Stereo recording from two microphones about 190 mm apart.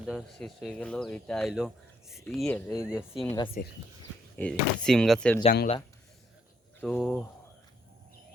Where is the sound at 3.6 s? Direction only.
45° left (ahead or behind).